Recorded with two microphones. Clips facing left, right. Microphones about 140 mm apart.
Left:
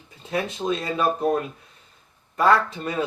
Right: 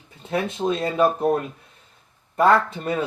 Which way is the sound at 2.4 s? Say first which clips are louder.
Right 2 dB; 55° right (ahead or behind).